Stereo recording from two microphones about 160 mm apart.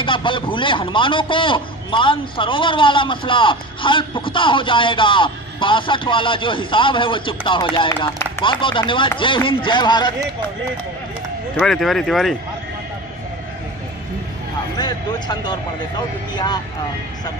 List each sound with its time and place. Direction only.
0.0 s a man's voice: 30° left (ahead or behind)
11.5 s speech: centre (ahead or behind)
14.8 s speech: 25° left (ahead or behind)